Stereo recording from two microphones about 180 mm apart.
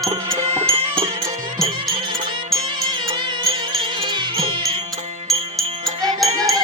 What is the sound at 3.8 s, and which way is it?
Music, 30° right (ahead or behind).